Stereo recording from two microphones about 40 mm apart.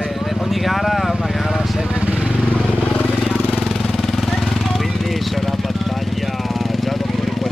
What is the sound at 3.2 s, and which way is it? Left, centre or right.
Vehicle, centre.